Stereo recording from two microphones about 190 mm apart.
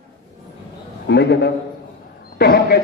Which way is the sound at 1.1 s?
65° left (ahead or behind).